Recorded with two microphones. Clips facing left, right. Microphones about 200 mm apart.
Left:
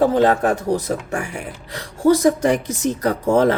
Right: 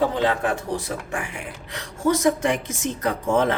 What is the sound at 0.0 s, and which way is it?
Speech, 45° left (ahead or behind).